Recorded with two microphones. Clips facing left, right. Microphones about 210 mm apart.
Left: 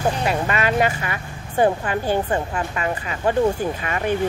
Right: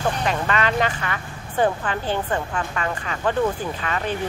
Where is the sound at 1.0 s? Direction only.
15° left (ahead or behind).